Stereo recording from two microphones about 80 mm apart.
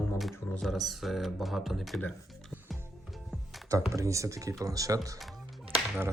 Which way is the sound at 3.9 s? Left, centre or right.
Right.